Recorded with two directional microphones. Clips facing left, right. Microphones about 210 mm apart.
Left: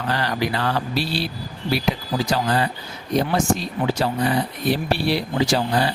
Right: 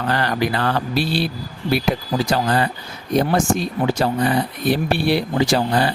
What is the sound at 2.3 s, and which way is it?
Speech, 50° right (ahead or behind).